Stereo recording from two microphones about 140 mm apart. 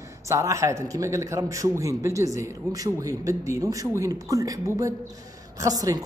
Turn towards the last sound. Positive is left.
turn(degrees=-25)  # may be behind; listen again after turning